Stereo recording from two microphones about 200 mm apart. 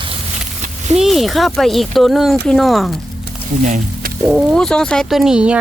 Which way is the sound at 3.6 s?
40° right (ahead or behind).